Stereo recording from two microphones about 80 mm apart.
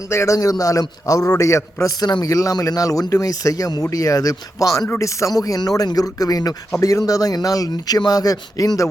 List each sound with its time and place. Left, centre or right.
0.1 s a man's voice: left
2.0 s speech: left
2.3 s speech: left